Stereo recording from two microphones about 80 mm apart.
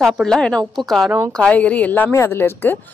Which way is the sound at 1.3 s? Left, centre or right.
Centre.